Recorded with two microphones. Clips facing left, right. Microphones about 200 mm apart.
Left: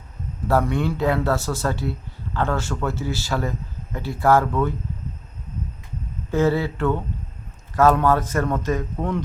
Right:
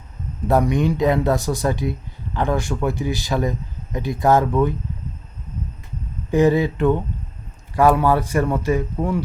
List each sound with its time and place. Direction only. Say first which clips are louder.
0.4 s speech: right 3 dB; 15° right (ahead or behind)
6.3 s speech: right 4 dB; 15° right (ahead or behind)